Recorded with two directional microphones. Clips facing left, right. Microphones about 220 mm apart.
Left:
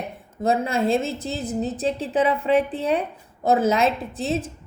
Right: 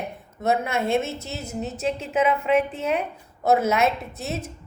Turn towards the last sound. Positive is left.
turn(degrees=30)  # may be behind; listen again after turning